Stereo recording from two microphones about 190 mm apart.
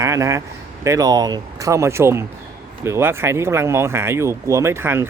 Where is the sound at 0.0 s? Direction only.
15° right (ahead or behind).